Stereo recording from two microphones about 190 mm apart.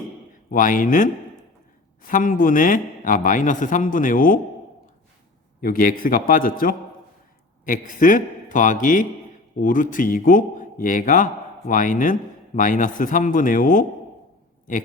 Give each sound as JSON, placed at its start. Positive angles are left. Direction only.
{"t": 0.5, "sound": "a man's voice", "side_deg": 45}
{"t": 5.5, "sound": "a man's voice", "side_deg": 50}